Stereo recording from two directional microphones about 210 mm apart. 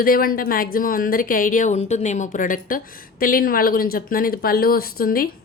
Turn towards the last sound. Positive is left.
turn(degrees=45)  # may be behind; listen again after turning